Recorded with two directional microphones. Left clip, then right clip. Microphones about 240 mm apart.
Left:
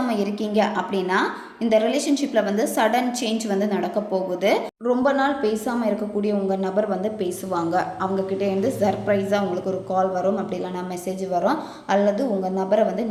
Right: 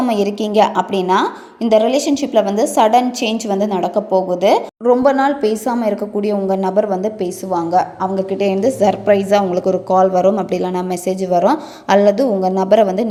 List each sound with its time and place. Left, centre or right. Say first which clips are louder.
0.1 s a woman's voice: right 8 dB; right